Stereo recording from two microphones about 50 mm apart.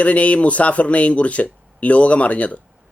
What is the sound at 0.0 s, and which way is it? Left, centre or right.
Speech, left.